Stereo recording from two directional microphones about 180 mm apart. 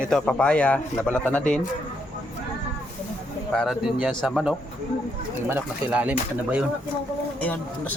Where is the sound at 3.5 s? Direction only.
Centre (ahead or behind).